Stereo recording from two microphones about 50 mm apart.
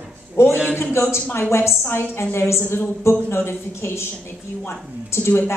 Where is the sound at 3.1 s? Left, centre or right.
Left.